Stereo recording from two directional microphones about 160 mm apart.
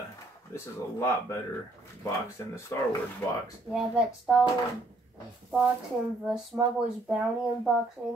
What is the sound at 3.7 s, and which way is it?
Speech, 5° right (ahead or behind).